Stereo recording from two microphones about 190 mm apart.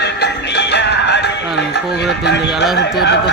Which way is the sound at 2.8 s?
60° left (ahead or behind).